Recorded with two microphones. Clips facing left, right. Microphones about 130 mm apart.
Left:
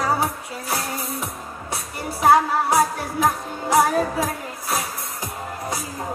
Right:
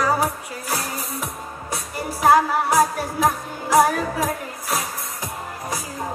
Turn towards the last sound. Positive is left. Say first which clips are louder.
# even
turn(degrees=25)  # may be behind; listen again after turning